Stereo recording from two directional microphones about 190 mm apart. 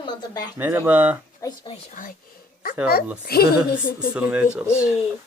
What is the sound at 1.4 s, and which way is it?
Speech, 20° left (ahead or behind).